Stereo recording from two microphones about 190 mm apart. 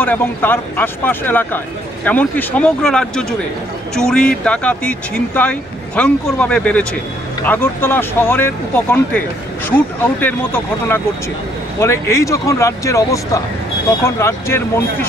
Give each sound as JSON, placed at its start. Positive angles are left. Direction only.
{"t": 0.0, "sound": "speech", "side_deg": 10}